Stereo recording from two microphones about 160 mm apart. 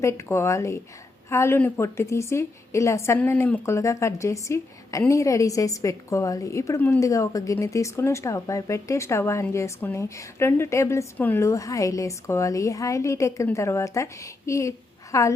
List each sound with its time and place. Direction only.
0.0 s a woman's voice: 15° left (ahead or behind)